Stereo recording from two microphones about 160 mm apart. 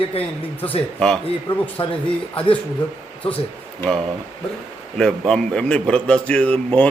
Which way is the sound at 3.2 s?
35° left (ahead or behind).